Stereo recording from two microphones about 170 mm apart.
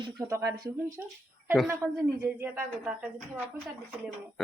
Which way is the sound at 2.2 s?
10° right (ahead or behind).